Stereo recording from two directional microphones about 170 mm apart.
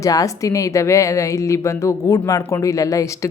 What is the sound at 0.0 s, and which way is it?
A woman's voice, 20° left (ahead or behind).